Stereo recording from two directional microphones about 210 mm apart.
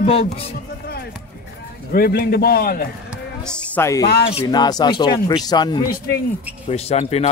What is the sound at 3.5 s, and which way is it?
Speech, 10° left (ahead or behind).